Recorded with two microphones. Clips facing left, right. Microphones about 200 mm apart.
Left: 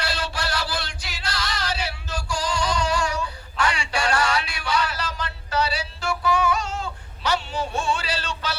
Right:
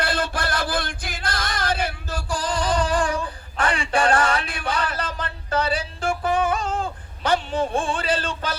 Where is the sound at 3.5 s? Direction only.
55° right (ahead or behind).